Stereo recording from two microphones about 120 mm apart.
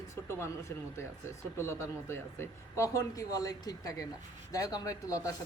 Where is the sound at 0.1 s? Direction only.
25° left (ahead or behind).